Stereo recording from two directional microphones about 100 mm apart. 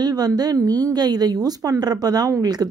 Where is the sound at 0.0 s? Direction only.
40° right (ahead or behind).